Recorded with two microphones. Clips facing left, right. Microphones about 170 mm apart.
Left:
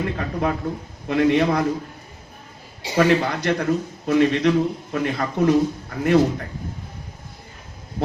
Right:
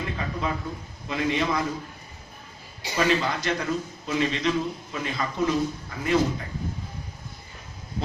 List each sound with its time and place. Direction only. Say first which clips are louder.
0.0 s a man's voice: left 6 dB; 60° left (ahead or behind)
2.9 s a man's voice: left 6 dB; 60° left (ahead or behind)